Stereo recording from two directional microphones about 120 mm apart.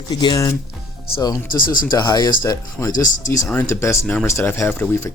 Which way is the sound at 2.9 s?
90° left.